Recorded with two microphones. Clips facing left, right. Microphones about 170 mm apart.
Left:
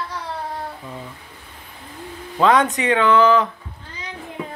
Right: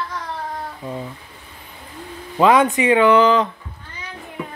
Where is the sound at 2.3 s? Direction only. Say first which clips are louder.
Right 2 dB; 10° right (ahead or behind).